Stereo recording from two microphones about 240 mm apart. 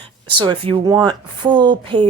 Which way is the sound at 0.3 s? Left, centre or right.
Right.